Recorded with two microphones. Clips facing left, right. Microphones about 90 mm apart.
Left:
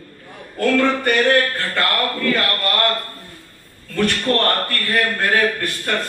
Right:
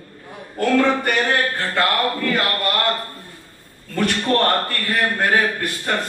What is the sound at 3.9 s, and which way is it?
Speech, 15° right (ahead or behind).